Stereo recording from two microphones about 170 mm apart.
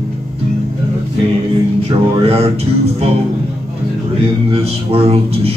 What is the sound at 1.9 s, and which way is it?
Music, 35° right (ahead or behind).